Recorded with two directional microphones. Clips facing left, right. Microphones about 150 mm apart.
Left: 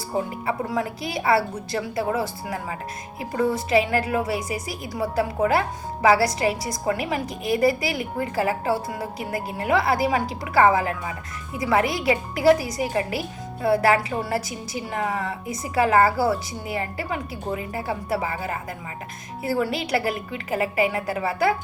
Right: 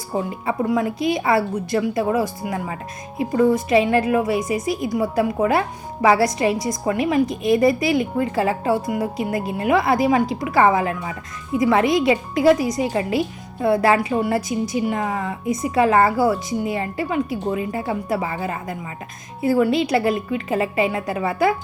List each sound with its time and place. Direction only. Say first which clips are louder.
0.4 s speech: right 5 dB; 20° right (ahead or behind)